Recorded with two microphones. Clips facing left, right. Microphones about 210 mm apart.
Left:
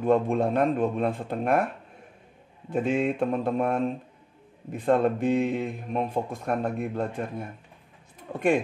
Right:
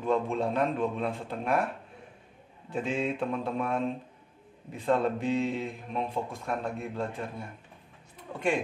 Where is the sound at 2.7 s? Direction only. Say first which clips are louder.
Left 5 dB; 50° left (ahead or behind).